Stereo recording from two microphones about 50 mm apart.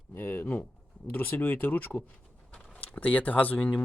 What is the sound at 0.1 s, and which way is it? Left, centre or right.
Speech, left.